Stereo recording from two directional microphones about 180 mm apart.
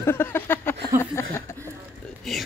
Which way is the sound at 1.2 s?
15° left (ahead or behind).